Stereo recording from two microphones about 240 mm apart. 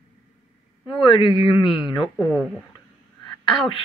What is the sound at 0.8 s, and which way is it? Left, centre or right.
A woman's voice, left.